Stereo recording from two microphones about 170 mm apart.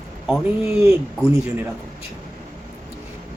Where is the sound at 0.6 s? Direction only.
15° right (ahead or behind).